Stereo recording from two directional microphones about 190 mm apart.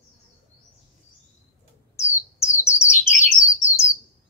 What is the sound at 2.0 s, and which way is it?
Bird, 15° left (ahead or behind).